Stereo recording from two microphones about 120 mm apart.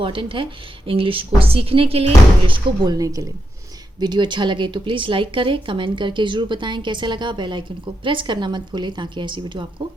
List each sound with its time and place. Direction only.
0.0 s speech: 45° right (ahead or behind)
2.8 s speech: 30° right (ahead or behind)